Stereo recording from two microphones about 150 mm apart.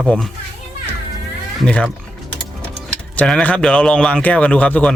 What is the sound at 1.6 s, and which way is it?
Speech, 5° left (ahead or behind).